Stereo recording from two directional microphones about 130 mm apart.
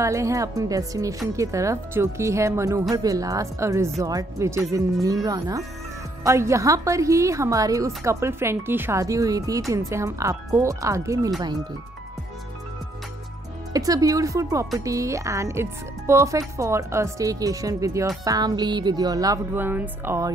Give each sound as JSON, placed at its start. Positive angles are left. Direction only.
{"t": 0.0, "sound": "a woman's voice", "side_deg": -25}
{"t": 13.7, "sound": "a woman's voice", "side_deg": -25}
{"t": 19.5, "sound": "speech", "side_deg": -15}